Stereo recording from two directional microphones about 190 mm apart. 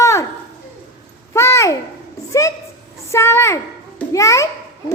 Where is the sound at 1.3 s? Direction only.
15° left (ahead or behind).